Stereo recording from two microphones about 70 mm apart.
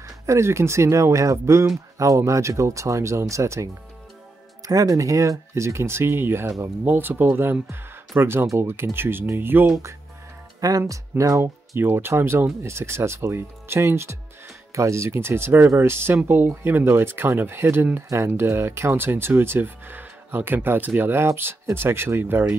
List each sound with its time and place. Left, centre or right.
0.0 s speech: right
10.8 s speech: right
11.4 s speech: right